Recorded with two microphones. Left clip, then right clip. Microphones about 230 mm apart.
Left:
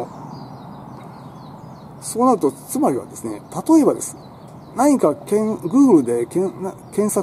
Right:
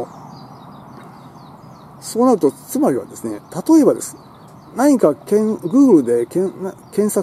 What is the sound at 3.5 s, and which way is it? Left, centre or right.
Speech, centre.